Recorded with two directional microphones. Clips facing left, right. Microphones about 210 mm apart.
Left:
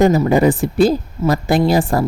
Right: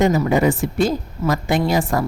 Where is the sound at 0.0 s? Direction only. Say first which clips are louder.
Left 4 dB; 35° left (ahead or behind).